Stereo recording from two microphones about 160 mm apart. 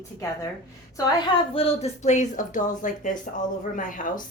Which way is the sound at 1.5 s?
40° left (ahead or behind).